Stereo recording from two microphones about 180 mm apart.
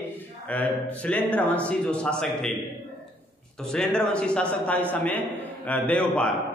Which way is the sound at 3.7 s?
5° left (ahead or behind).